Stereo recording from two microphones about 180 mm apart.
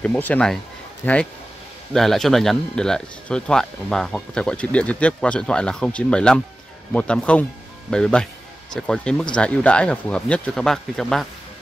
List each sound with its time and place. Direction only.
0.0 s speech: 10° left (ahead or behind)